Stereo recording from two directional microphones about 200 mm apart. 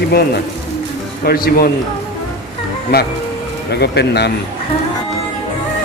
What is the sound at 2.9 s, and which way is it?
A man's voice, 50° left (ahead or behind).